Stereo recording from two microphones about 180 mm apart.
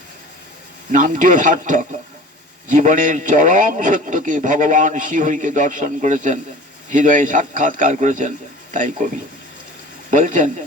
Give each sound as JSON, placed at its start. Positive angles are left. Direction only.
{"t": 0.9, "sound": "a man's voice", "side_deg": -45}
{"t": 10.1, "sound": "a man's voice", "side_deg": -45}